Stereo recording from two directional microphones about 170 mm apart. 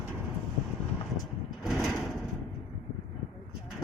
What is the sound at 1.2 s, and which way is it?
Vehicle, centre (ahead or behind).